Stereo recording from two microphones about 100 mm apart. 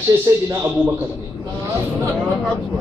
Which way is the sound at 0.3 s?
35° right (ahead or behind).